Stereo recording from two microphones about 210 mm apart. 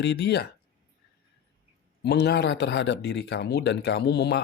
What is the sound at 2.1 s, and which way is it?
Speech, 50° left (ahead or behind).